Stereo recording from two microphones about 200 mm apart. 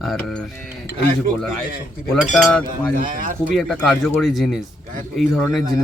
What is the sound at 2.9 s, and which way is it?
Speech, 45° right (ahead or behind).